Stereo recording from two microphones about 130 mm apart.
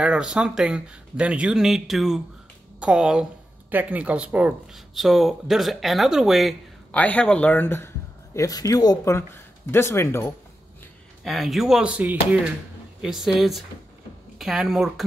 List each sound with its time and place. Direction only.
0.0 s speech: 10° right (ahead or behind)
6.9 s a man's voice: 10° left (ahead or behind)
8.4 s speech: 30° left (ahead or behind)
11.2 s speech: centre (ahead or behind)